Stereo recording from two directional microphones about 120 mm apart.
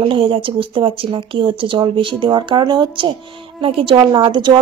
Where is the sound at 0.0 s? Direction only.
50° right (ahead or behind).